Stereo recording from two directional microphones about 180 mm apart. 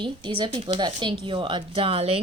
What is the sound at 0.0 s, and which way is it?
Speech, 25° right (ahead or behind).